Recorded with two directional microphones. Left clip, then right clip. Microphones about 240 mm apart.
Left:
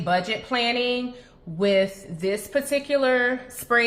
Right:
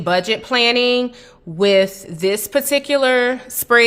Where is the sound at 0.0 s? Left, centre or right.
Right.